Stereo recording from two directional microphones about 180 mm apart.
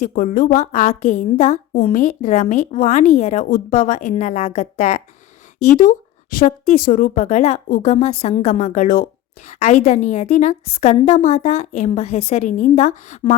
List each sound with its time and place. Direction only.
0.0 s a woman's voice: 50° left (ahead or behind)